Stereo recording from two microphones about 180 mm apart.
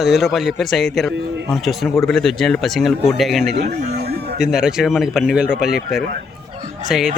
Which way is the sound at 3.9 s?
60° right (ahead or behind).